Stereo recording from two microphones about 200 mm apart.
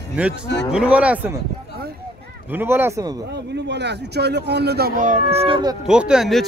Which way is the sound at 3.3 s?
60° right (ahead or behind).